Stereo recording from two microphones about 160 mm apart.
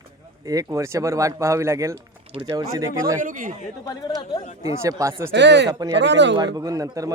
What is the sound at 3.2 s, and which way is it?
Speech, 55° right (ahead or behind).